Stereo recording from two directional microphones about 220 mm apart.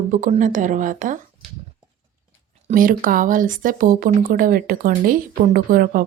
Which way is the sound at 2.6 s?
40° right (ahead or behind).